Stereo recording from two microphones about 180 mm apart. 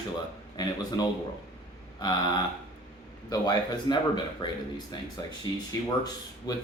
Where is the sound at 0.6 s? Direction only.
20° left (ahead or behind).